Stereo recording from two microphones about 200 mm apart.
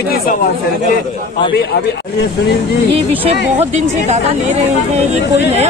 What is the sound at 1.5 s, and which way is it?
Speech, 55° left (ahead or behind).